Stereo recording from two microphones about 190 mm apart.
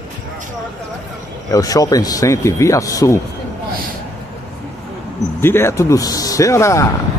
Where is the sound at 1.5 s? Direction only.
20° left (ahead or behind).